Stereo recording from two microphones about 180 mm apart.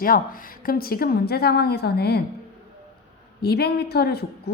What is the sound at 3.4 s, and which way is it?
A woman's voice, 60° left (ahead or behind).